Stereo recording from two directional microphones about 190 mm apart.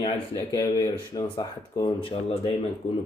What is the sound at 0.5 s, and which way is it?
Speech, 20° left (ahead or behind).